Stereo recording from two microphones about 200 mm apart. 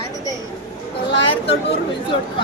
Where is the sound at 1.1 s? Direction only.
60° left (ahead or behind).